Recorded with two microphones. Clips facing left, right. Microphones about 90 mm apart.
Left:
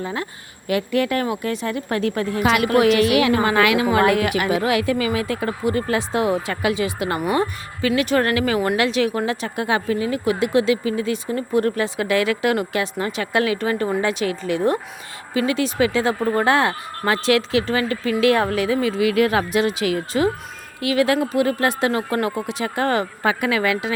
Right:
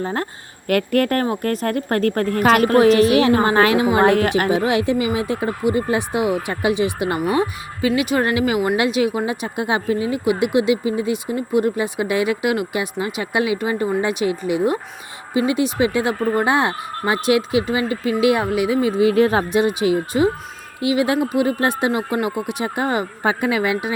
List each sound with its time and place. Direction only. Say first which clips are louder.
0.0 s a woman's voice: right 3 dB; 40° right (ahead or behind)
0.7 s a woman's voice: right 3 dB; 55° right (ahead or behind); by 23.9 s 20° right (ahead or behind)